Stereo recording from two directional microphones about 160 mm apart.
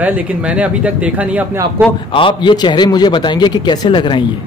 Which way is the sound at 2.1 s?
30° left (ahead or behind).